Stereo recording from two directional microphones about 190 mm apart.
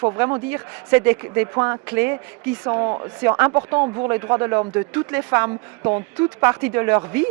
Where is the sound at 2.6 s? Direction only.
25° right (ahead or behind).